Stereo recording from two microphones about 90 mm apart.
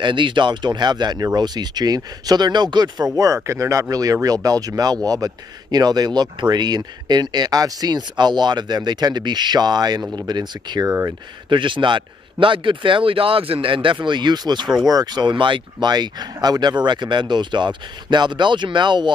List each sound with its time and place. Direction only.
0.0 s speech: 65° right (ahead or behind)
3.4 s speech: 35° right (ahead or behind); by 10.9 s 50° right (ahead or behind)
11.5 s a man's voice: 65° right (ahead or behind)